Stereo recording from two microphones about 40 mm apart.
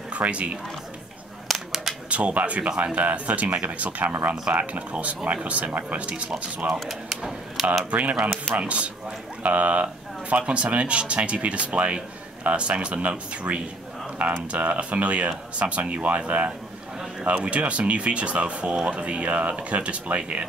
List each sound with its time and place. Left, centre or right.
0.1 s speech: right
1.5 s a sound: centre
2.0 s speech: right
6.0 s speech: right
6.7 s speech: centre
7.9 s speech: right